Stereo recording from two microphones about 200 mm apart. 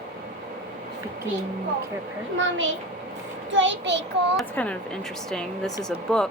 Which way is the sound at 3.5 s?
65° right (ahead or behind).